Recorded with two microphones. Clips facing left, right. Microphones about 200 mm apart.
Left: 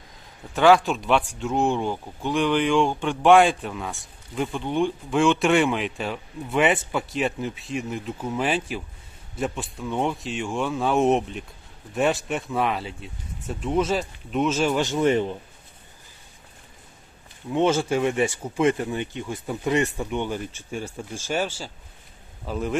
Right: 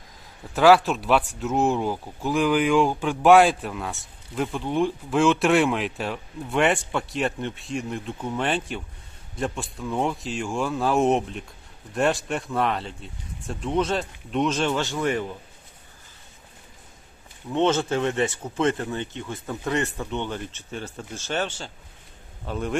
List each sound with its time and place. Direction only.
0.5 s speech: 5° right (ahead or behind)
14.8 s speech: 20° left (ahead or behind)
17.5 s speech: 10° left (ahead or behind)